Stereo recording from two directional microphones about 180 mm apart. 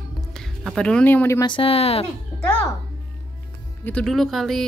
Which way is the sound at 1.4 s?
30° left (ahead or behind).